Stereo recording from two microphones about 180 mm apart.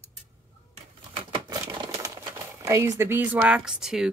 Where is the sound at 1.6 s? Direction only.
15° right (ahead or behind).